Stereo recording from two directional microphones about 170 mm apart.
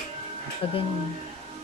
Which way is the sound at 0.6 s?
35° left (ahead or behind).